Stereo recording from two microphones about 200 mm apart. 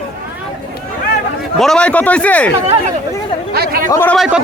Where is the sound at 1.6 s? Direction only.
5° left (ahead or behind).